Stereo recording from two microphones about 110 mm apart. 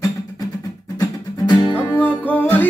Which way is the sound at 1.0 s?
40° left (ahead or behind).